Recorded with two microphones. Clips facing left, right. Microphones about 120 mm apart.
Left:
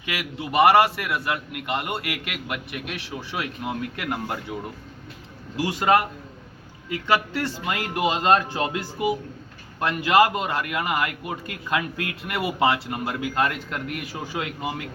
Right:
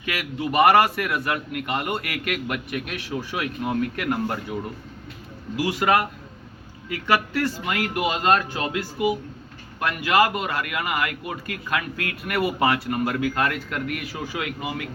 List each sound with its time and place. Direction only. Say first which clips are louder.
0.0 s a man's voice: right 3 dB; 15° left (ahead or behind)
5.5 s a man's voice: left 1 dB; 30° left (ahead or behind)